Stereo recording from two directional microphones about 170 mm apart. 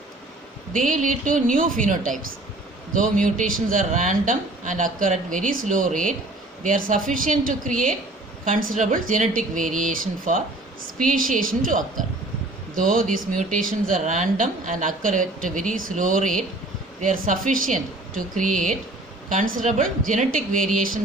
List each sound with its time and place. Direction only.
0.7 s speech: 50° right (ahead or behind)